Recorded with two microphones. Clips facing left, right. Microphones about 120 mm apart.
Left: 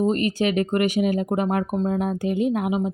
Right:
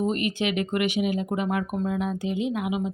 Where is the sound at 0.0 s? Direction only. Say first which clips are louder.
Left 4 dB; 35° left (ahead or behind).